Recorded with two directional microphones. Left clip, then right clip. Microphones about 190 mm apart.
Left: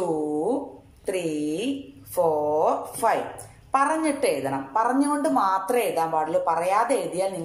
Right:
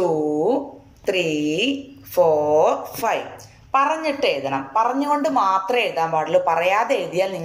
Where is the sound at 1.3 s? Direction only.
20° left (ahead or behind).